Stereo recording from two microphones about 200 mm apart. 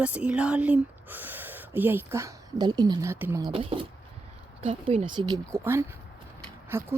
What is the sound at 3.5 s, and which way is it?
Speech, 25° right (ahead or behind).